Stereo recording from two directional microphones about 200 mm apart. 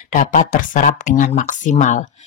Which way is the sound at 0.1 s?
40° left (ahead or behind).